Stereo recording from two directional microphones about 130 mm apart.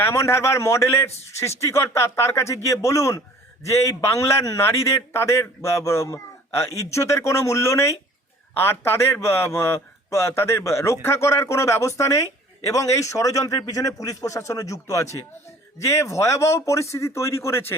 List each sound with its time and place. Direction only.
0.0 s a man's voice: 20° left (ahead or behind)